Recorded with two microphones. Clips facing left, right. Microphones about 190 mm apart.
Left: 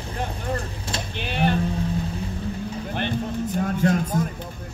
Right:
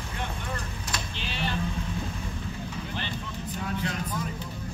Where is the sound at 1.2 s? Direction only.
55° left (ahead or behind).